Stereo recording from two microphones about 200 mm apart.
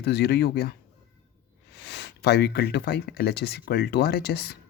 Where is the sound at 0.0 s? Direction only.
50° left (ahead or behind).